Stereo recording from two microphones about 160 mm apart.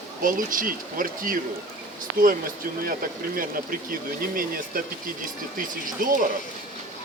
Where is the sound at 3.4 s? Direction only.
60° right (ahead or behind).